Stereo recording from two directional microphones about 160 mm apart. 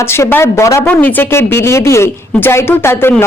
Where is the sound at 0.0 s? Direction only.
15° left (ahead or behind).